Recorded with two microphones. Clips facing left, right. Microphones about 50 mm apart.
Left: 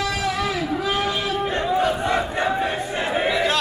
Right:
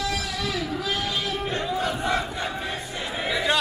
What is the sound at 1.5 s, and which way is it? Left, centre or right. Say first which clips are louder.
Battle cry: left 7 dB; left.